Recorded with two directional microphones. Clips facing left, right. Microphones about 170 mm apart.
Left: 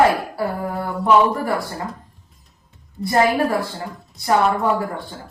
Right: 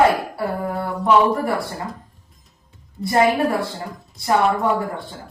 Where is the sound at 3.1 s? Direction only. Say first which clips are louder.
Even; 20° right (ahead or behind).